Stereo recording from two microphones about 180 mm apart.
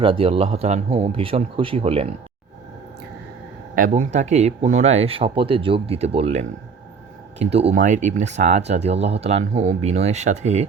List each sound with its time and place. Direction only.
0.0 s speech: 30° right (ahead or behind)
3.8 s speech: 45° right (ahead or behind)